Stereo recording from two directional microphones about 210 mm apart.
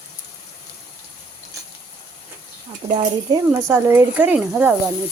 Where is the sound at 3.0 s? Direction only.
20° right (ahead or behind).